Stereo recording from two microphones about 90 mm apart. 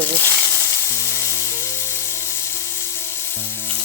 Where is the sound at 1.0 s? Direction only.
30° left (ahead or behind).